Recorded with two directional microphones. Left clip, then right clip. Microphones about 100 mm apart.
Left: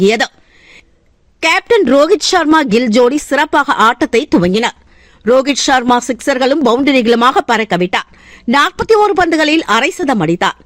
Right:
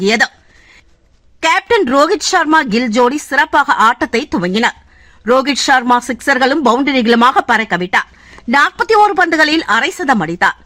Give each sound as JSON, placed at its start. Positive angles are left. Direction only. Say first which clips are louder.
{"t": 0.0, "sound": "speech", "louder": "left 1 dB", "side_deg": 40}
{"t": 1.4, "sound": "speech", "louder": "left 1 dB", "side_deg": 30}